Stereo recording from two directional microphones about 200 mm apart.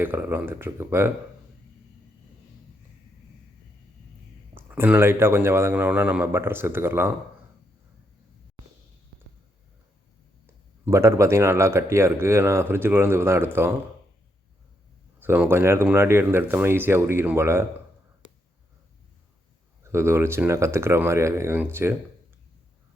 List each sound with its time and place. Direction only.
0.0 s speech: 10° right (ahead or behind)
4.5 s speech: 10° right (ahead or behind)
10.4 s speech: 15° right (ahead or behind)
15.2 s speech: 10° right (ahead or behind)
19.8 s speech: 15° right (ahead or behind)